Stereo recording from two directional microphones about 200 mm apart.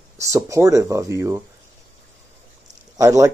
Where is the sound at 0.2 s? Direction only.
15° right (ahead or behind).